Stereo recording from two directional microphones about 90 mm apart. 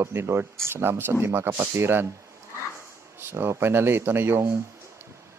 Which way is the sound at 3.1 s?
30° right (ahead or behind).